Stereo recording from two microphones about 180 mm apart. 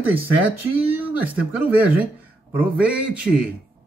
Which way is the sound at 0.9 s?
10° right (ahead or behind).